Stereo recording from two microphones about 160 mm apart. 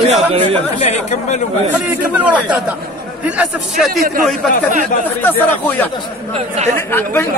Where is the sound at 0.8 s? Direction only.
45° left (ahead or behind).